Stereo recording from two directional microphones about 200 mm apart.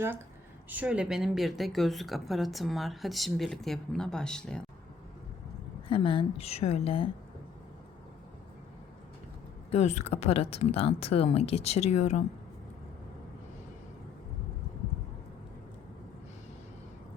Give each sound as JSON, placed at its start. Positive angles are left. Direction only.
{"t": 0.7, "sound": "speech", "side_deg": -5}
{"t": 5.9, "sound": "a woman's voice", "side_deg": 25}
{"t": 9.7, "sound": "speech", "side_deg": 35}